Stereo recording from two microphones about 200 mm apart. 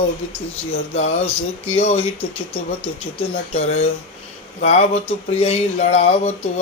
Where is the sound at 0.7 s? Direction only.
35° left (ahead or behind).